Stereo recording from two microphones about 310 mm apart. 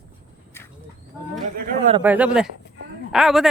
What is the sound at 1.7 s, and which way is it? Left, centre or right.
Speech, right.